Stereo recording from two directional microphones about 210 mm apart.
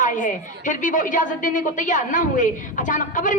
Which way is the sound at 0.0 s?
40° left (ahead or behind).